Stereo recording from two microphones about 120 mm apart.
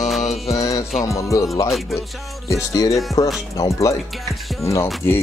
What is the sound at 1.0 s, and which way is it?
Speech, 25° left (ahead or behind).